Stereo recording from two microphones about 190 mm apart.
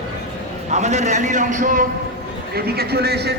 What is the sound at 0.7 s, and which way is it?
A man's voice, 40° right (ahead or behind).